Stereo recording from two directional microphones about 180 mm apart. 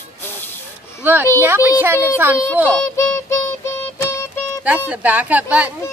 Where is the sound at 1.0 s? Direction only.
10° right (ahead or behind).